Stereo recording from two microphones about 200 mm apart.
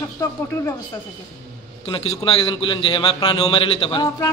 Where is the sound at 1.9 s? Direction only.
25° left (ahead or behind).